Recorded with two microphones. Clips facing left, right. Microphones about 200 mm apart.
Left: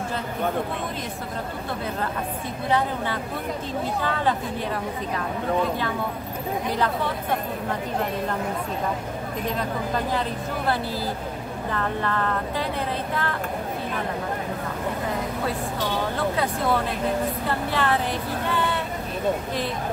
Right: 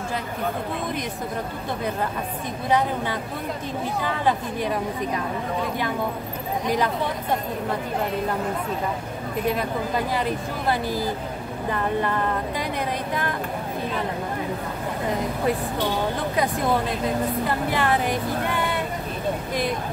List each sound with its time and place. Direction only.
4.0 s speech: 15° right (ahead or behind)
9.5 s speech: 10° right (ahead or behind)
17.6 s speech: 15° right (ahead or behind)